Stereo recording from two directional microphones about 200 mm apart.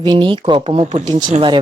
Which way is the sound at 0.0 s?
25° right (ahead or behind).